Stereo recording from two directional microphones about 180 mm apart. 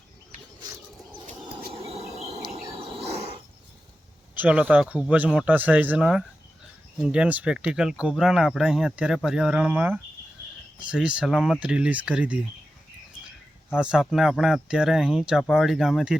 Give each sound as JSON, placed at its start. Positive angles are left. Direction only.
{"t": 1.7, "sound": "cricket", "side_deg": -35}
{"t": 2.5, "sound": "a sound", "side_deg": -30}
{"t": 4.4, "sound": "speech", "side_deg": -5}
{"t": 13.7, "sound": "speech", "side_deg": -5}